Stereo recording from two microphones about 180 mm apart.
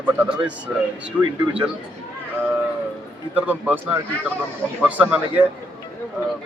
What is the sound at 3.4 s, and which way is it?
Speech, 10° right (ahead or behind).